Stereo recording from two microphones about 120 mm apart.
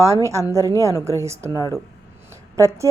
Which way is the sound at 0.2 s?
25° right (ahead or behind).